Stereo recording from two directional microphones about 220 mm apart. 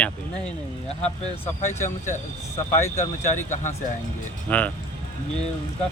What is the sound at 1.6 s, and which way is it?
Speech, 35° left (ahead or behind).